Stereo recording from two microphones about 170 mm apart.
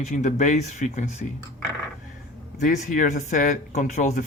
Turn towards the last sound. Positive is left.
turn(degrees=45)  # may be behind; listen again after turning